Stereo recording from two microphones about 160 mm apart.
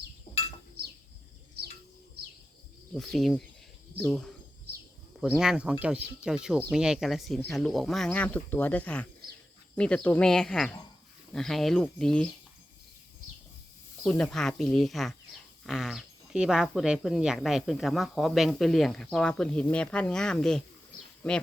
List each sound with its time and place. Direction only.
0.8 s a sound: 80° right
2.9 s speech: centre (ahead or behind)
5.3 s speech: 5° right (ahead or behind)
14.0 s speech: 5° left (ahead or behind)